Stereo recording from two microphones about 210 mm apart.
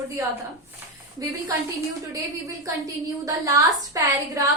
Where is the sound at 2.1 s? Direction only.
15° right (ahead or behind).